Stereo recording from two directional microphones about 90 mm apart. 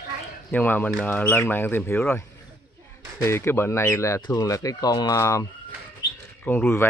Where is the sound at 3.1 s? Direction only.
30° left (ahead or behind).